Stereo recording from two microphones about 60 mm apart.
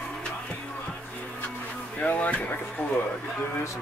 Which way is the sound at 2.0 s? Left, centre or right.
Left.